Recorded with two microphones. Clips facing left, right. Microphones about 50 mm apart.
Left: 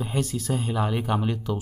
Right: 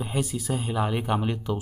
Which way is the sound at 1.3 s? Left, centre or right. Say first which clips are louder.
Even; right.